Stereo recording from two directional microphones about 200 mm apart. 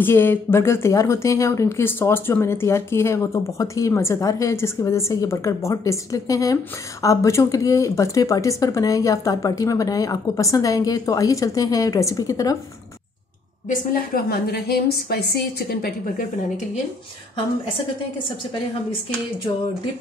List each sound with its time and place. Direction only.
0.0 s speech: 10° left (ahead or behind)
13.7 s a woman's voice: 50° left (ahead or behind)